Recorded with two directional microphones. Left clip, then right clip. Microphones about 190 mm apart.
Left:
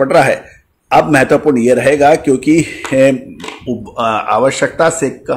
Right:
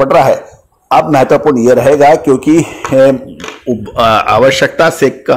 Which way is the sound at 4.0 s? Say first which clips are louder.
Right 5 dB; 25° right (ahead or behind).